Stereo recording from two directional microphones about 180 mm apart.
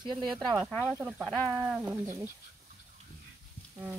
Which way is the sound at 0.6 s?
Centre (ahead or behind).